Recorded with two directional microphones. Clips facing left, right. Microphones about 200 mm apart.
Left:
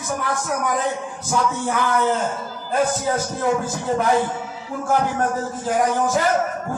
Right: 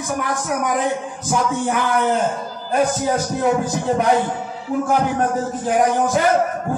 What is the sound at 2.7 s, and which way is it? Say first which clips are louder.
A man's voice: right 2 dB; 15° right (ahead or behind).